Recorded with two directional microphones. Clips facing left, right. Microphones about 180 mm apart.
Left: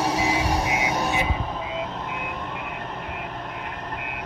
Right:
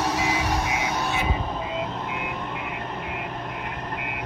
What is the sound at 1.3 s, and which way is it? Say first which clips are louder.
Vehicle: right 1 dB; centre (ahead or behind).